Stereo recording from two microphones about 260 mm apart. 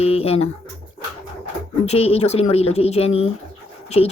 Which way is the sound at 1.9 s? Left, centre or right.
Left.